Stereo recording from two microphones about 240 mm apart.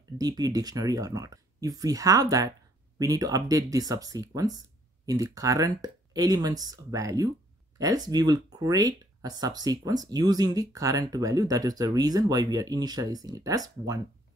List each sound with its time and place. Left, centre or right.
0.2 s speech: centre